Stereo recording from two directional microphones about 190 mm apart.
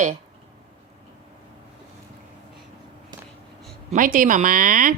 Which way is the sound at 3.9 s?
45° right (ahead or behind).